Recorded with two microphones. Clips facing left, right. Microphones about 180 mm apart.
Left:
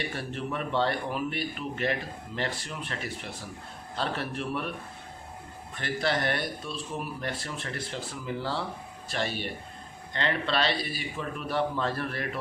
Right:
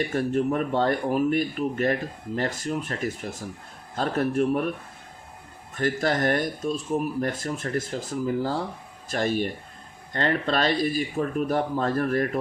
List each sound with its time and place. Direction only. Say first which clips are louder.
0.0 s speech: right 10 dB; 45° right (ahead or behind)
5.7 s speech: right 5 dB; 45° right (ahead or behind)